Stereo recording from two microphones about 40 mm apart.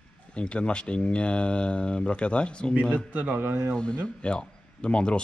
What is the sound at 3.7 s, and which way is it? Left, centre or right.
Speech, left.